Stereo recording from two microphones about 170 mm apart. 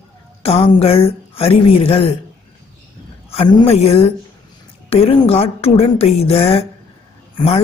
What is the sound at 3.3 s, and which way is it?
Speech, 35° left (ahead or behind).